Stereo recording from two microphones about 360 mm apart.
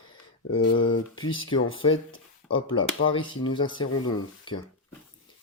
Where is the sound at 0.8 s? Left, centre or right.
Left.